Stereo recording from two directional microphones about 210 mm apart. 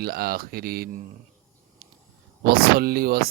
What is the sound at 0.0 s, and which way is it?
Speech, 45° right (ahead or behind).